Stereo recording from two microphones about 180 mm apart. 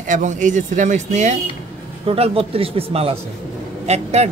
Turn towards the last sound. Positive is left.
turn(degrees=-35)  # may be behind; listen again after turning